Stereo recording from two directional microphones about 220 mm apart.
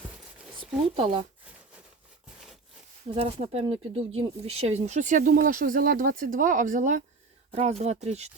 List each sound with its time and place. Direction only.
0.6 s speech: 25° right (ahead or behind)
3.2 s speech: 25° right (ahead or behind)